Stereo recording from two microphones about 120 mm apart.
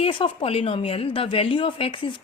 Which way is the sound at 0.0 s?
50° left (ahead or behind).